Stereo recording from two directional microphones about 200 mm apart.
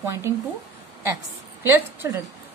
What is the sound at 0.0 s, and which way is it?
Speech, 15° right (ahead or behind).